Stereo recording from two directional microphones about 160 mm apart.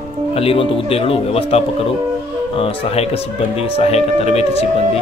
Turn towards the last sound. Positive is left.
turn(degrees=40)  # may be behind; listen again after turning